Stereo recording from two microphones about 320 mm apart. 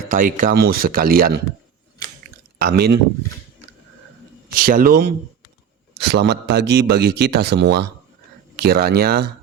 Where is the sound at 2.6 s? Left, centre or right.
Right.